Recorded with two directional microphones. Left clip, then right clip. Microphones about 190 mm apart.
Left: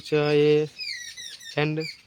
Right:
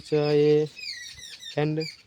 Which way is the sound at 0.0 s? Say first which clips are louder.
Left 1 dB; 5° right (ahead or behind).